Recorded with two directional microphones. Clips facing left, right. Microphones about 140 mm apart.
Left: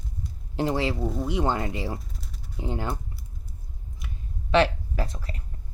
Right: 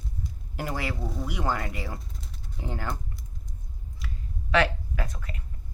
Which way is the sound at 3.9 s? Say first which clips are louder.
Right 1 dB; 25° left (ahead or behind).